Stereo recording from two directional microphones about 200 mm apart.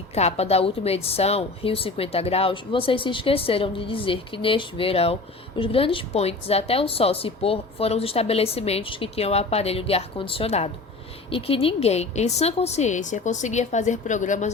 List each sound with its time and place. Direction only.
0.1 s a woman's voice: 30° left (ahead or behind)